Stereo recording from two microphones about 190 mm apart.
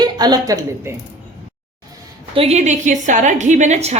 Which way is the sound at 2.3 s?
30° right (ahead or behind).